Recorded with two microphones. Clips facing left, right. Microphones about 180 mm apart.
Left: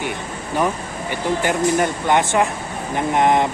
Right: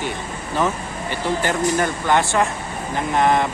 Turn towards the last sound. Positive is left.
turn(degrees=20)  # may be behind; listen again after turning